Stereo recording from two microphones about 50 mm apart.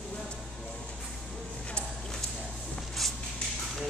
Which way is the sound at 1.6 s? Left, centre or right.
Centre.